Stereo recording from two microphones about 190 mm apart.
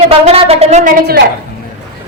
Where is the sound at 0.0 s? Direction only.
30° right (ahead or behind).